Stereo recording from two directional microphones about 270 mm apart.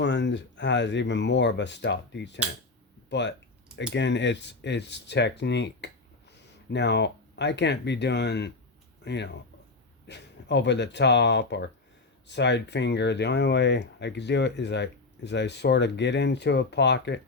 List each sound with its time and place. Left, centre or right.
0.0 s speech: left